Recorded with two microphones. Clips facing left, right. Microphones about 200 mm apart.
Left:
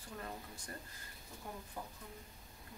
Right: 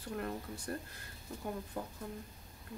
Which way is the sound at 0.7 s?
65° right (ahead or behind).